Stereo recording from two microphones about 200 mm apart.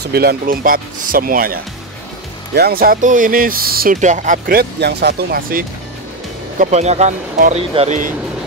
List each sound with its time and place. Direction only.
0.0 s speech: 50° right (ahead or behind)
6.6 s speech: 35° right (ahead or behind)